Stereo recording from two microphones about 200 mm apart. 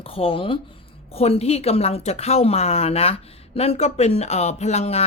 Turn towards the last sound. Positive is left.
turn(degrees=35)  # may be behind; listen again after turning